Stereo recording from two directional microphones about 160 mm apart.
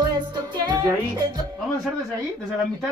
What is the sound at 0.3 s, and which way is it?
Music, 30° right (ahead or behind).